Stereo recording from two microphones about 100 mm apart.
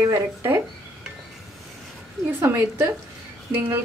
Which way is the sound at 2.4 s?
25° right (ahead or behind).